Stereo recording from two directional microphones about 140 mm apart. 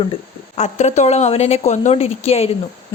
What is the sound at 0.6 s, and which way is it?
A woman's voice, 55° left (ahead or behind).